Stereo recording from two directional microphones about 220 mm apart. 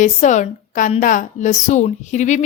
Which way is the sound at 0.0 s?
35° left (ahead or behind).